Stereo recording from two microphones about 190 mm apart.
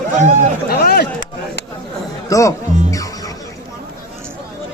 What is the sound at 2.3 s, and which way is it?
Music, 15° left (ahead or behind).